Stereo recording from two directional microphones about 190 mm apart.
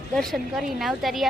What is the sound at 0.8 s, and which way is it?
Speech, centre (ahead or behind).